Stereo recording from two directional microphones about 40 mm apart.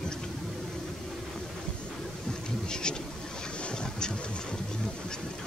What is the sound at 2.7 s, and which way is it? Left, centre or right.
Speech, left.